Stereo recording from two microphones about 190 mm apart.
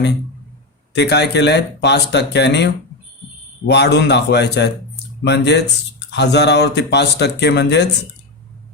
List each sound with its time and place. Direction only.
0.9 s speech: 65° left (ahead or behind)